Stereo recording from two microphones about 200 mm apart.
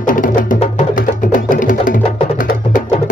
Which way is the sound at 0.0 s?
40° left (ahead or behind).